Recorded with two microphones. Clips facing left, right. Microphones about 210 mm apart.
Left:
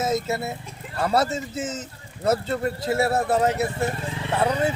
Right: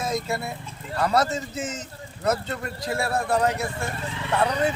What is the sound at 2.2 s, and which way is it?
A man's voice, 25° left (ahead or behind).